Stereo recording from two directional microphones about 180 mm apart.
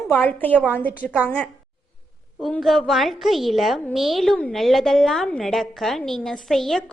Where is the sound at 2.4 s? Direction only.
Centre (ahead or behind).